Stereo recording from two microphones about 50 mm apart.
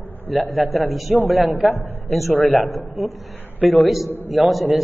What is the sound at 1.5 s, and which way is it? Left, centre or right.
Speech, right.